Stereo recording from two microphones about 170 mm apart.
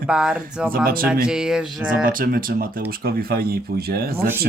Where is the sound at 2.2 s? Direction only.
55° right (ahead or behind).